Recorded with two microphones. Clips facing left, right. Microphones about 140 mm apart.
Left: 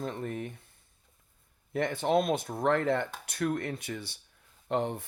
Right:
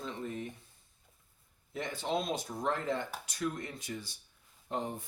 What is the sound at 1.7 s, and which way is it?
Speech, 60° left (ahead or behind).